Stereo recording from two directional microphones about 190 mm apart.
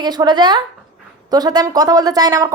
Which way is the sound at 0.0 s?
20° right (ahead or behind).